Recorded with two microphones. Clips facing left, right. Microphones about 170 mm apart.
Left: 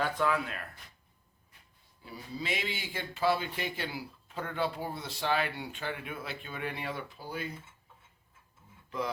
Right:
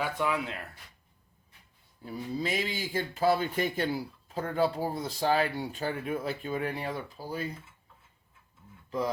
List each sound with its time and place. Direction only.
0.0 s speech: 10° right (ahead or behind)
2.0 s speech: 40° right (ahead or behind)